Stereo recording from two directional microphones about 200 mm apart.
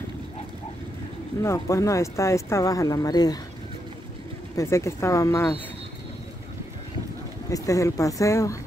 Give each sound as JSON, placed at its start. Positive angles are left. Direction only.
{"t": 1.4, "sound": "speech", "side_deg": 15}
{"t": 4.6, "sound": "speech", "side_deg": 15}
{"t": 7.4, "sound": "speech", "side_deg": 15}